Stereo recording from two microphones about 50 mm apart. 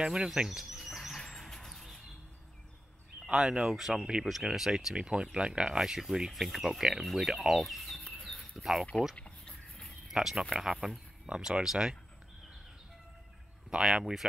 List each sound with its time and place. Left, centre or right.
0.0 s a sound: centre
3.6 s speech: centre
5.8 s speech: centre
7.1 s speech: centre
7.6 s fowl: centre
8.1 s a sound: centre
9.1 s a sound: centre
10.0 s speech: centre
13.7 s speech: centre